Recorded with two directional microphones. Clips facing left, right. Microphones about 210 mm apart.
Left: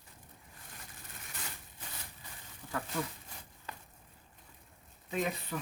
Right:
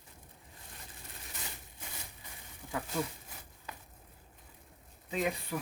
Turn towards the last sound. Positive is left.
turn(degrees=-15)  # may be behind; listen again after turning